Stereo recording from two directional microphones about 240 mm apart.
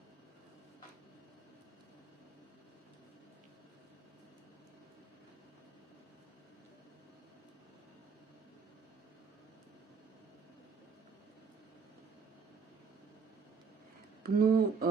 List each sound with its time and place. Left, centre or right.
14.3 s speech: right